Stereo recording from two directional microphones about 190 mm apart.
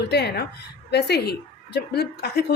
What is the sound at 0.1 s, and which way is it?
A woman's voice, 60° left (ahead or behind).